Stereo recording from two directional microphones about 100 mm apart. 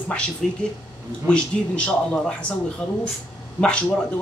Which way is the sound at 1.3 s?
10° left (ahead or behind).